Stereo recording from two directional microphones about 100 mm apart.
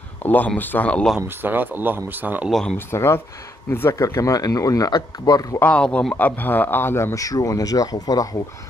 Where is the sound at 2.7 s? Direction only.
25° left (ahead or behind).